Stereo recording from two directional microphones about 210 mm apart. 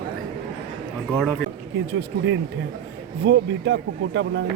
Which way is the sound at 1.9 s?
60° right (ahead or behind).